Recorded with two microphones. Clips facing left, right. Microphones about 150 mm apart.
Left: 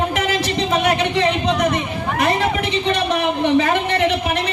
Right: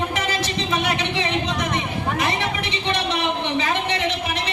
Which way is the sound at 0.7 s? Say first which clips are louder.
Left 6 dB; 55° left (ahead or behind).